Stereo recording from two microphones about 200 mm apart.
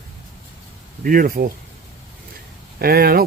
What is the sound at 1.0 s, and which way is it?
Speech, 45° right (ahead or behind).